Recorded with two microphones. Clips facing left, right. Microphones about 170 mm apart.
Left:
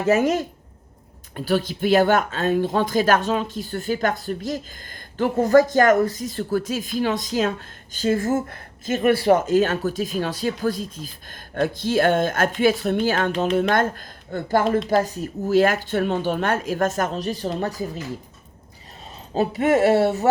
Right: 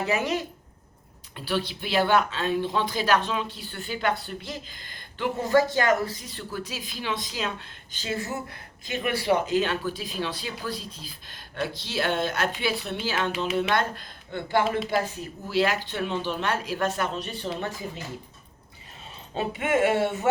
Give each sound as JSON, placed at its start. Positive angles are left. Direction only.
{"t": 0.0, "sound": "speech", "side_deg": 45}
{"t": 17.6, "sound": "music", "side_deg": 40}
{"t": 19.3, "sound": "music", "side_deg": 40}